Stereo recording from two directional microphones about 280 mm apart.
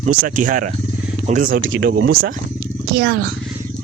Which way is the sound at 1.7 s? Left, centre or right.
Right.